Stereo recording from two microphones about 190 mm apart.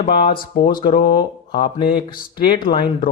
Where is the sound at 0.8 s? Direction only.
25° left (ahead or behind).